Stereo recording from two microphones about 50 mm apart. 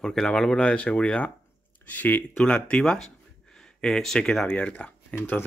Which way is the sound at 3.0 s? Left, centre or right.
Centre.